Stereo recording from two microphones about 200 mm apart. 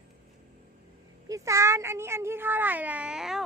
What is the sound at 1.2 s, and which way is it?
A child's voice, 15° right (ahead or behind).